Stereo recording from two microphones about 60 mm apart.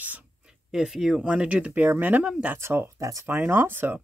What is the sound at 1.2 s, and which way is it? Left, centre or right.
Speech, centre.